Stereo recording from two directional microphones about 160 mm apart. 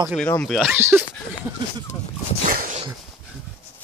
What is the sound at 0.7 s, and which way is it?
Speech, 15° right (ahead or behind).